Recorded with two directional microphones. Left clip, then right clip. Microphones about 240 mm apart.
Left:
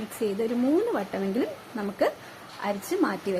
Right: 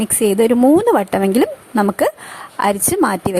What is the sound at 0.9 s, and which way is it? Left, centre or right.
Speech, right.